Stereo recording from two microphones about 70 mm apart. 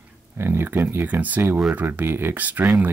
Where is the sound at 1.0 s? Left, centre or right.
Right.